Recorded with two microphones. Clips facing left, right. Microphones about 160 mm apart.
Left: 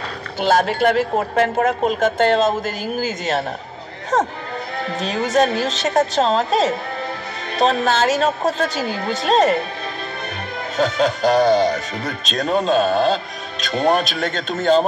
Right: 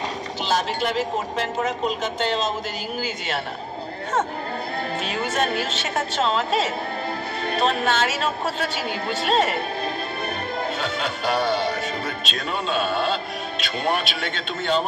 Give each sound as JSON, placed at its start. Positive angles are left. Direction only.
{"t": 0.4, "sound": "speech", "side_deg": 55}
{"t": 5.0, "sound": "speech", "side_deg": 40}
{"t": 10.8, "sound": "speech", "side_deg": 40}